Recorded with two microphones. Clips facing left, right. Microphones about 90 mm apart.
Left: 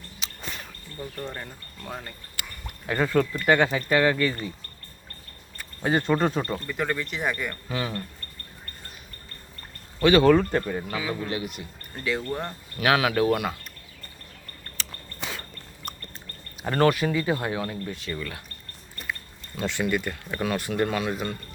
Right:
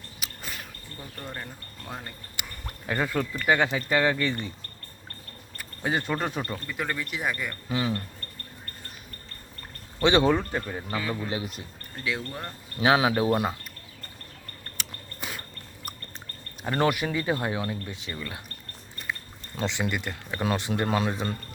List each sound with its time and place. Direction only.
0.2 s a sound: 5° right (ahead or behind)
1.2 s speech: 5° right (ahead or behind)
2.4 s a sound: 20° right (ahead or behind)
2.8 s speech: 10° right (ahead or behind)
5.5 s speech: 5° right (ahead or behind)
7.7 s speech: 20° right (ahead or behind)
10.0 s speech: 25° right (ahead or behind)
10.9 s speech: 5° left (ahead or behind)
11.3 s speech: 30° right (ahead or behind)
11.9 s speech: centre (ahead or behind)
12.8 s speech: 25° right (ahead or behind)
14.8 s biting: 10° right (ahead or behind)
16.8 s speech: 20° right (ahead or behind)
19.6 s speech: 20° right (ahead or behind)